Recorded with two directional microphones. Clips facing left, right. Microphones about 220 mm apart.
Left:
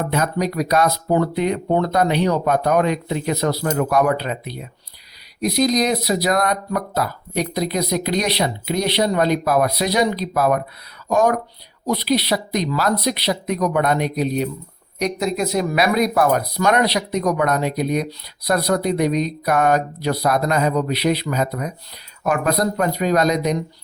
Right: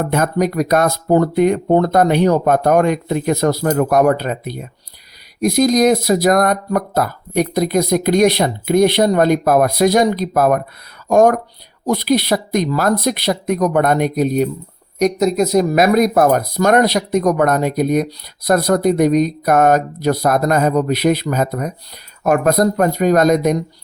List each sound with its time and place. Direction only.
0.0 s speech: 50° right (ahead or behind)